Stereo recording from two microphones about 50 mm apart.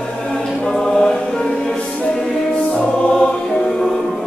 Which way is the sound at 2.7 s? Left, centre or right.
Left.